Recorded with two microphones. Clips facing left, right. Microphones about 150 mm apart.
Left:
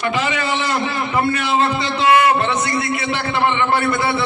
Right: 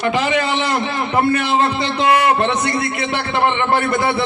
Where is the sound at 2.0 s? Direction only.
40° right (ahead or behind).